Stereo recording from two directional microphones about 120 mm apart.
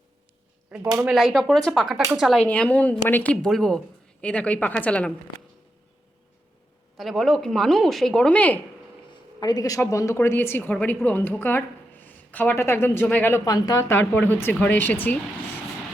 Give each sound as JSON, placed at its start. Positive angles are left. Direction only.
{"t": 0.7, "sound": "speech", "side_deg": -5}
{"t": 2.5, "sound": "speech", "side_deg": 10}
{"t": 3.4, "sound": "speech", "side_deg": 5}
{"t": 6.9, "sound": "speech", "side_deg": 0}
{"t": 9.4, "sound": "speech", "side_deg": 30}
{"t": 13.3, "sound": "speech", "side_deg": 30}